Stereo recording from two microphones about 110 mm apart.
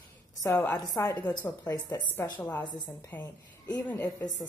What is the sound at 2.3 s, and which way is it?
Speech, 15° left (ahead or behind).